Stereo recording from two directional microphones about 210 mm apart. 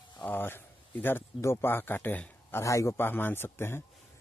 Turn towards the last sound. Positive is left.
turn(degrees=10)  # may be behind; listen again after turning